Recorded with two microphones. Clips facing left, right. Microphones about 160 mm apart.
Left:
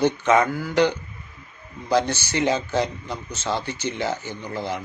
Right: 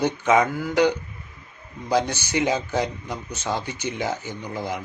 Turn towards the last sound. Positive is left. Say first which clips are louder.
# left 1 dB
turn(degrees=-15)  # may be behind; listen again after turning